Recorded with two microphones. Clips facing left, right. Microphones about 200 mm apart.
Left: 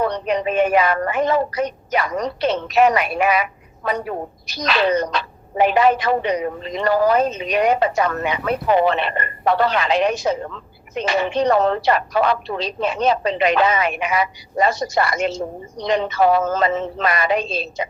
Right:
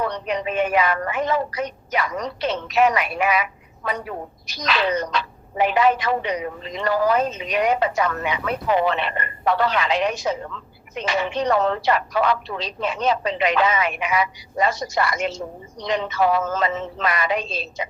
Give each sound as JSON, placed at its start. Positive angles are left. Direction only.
{"t": 0.0, "sound": "a woman's voice", "side_deg": 40}